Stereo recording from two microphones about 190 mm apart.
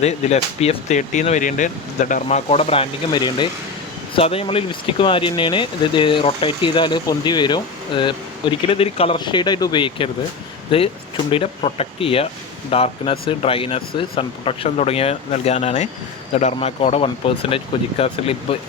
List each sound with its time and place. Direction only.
0.0 s speech: 35° left (ahead or behind)
3.1 s speech: 25° left (ahead or behind)
11.3 s speech: 30° left (ahead or behind)